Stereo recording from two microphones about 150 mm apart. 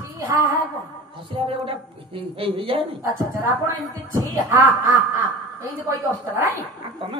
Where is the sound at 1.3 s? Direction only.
35° right (ahead or behind).